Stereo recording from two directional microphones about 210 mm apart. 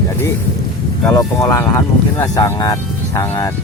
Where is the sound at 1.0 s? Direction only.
10° left (ahead or behind).